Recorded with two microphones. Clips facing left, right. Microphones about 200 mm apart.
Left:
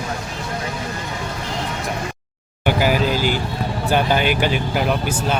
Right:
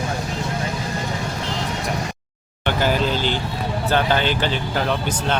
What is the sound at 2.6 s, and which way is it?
Speech, 10° left (ahead or behind).